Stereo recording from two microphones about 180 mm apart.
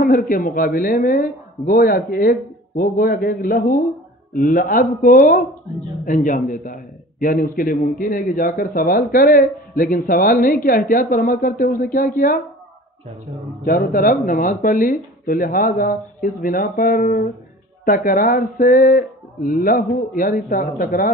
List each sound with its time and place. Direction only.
0.3 s a man's voice: 50° left (ahead or behind)
13.7 s a man's voice: 50° left (ahead or behind)